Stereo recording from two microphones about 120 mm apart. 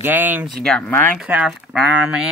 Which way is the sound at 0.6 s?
5° left (ahead or behind).